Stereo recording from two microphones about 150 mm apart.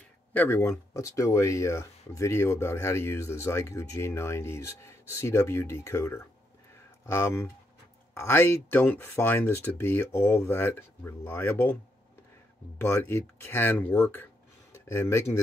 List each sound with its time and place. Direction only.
0.3 s speech: 15° left (ahead or behind)
12.8 s speech: 15° left (ahead or behind)